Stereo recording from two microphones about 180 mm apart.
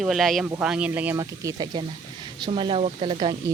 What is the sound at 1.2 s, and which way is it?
Speech, 20° right (ahead or behind).